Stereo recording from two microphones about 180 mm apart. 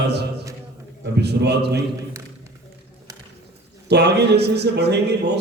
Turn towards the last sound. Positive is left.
turn(degrees=-65)  # may be behind; listen again after turning